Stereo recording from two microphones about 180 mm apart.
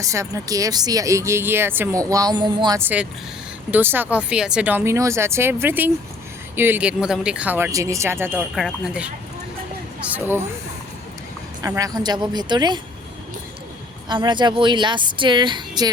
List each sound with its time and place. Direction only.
0.0 s speech: 15° right (ahead or behind)
2.8 s speech: 10° right (ahead or behind)
8.5 s speech: 5° right (ahead or behind)
11.6 s speech: 20° right (ahead or behind)
14.1 s speech: 25° right (ahead or behind)